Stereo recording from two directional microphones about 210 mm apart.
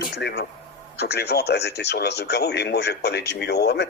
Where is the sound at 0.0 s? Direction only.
50° left (ahead or behind).